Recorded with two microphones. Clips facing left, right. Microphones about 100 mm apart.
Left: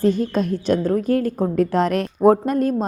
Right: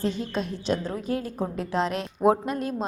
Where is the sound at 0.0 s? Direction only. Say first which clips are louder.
Left 9 dB; 50° left (ahead or behind).